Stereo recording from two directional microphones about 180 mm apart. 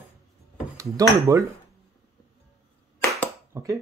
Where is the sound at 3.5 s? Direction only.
15° right (ahead or behind).